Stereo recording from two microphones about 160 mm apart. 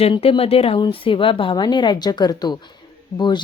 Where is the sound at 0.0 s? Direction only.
35° left (ahead or behind).